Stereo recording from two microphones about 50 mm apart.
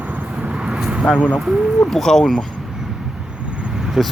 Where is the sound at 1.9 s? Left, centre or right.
Centre.